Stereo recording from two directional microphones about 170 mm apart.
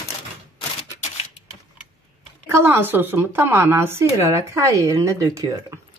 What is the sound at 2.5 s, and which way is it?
A woman's voice, 15° right (ahead or behind).